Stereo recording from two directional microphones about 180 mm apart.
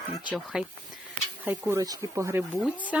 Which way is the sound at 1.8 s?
20° right (ahead or behind).